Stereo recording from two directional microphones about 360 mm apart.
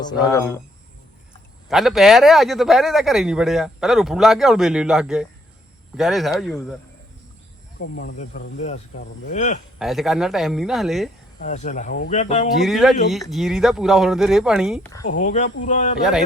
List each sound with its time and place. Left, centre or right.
0.2 s speech: centre
1.6 s a man's voice: centre
7.8 s speech: left
9.7 s a man's voice: centre
11.3 s speech: centre
12.6 s a man's voice: centre
15.1 s speech: left